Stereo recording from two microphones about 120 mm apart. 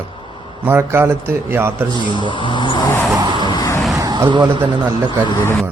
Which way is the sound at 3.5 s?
30° left (ahead or behind).